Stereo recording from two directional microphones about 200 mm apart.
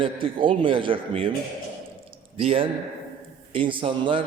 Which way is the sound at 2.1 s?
30° right (ahead or behind).